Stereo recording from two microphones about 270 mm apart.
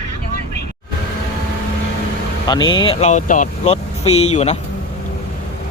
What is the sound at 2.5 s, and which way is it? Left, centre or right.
Speech, centre.